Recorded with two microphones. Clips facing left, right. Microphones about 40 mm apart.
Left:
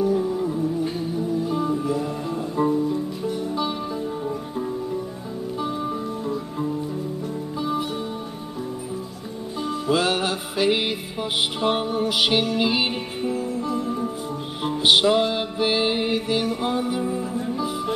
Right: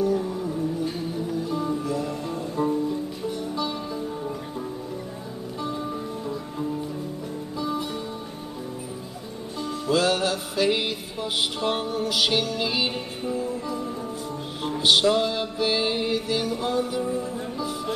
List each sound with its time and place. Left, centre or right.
0.0 s music: centre
1.7 s music: centre
7.5 s music: left
9.6 s music: left